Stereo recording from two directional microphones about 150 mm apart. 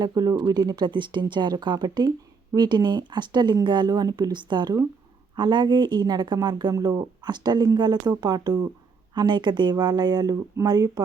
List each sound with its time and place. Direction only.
0.0 s speech: 25° right (ahead or behind)